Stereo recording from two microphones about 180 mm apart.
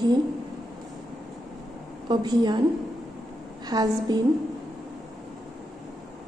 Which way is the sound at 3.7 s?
20° right (ahead or behind).